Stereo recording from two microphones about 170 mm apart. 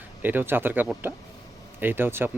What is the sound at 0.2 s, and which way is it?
Speech, 10° right (ahead or behind).